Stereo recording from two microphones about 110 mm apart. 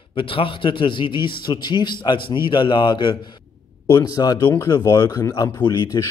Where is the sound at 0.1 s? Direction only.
55° left (ahead or behind).